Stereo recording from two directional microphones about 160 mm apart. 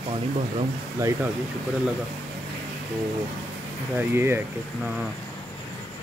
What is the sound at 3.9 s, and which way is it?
Speech, 15° right (ahead or behind).